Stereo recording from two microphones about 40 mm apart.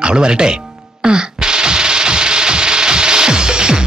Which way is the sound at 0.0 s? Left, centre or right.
Right.